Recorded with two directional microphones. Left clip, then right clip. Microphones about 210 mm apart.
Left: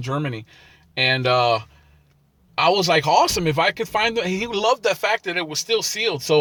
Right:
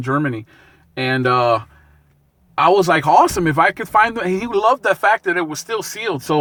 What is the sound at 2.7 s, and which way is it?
Speech, 15° right (ahead or behind).